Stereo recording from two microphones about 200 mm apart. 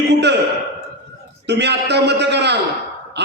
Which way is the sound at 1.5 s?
60° right (ahead or behind).